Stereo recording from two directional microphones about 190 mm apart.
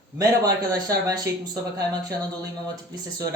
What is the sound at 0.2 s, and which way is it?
Speech, 20° right (ahead or behind).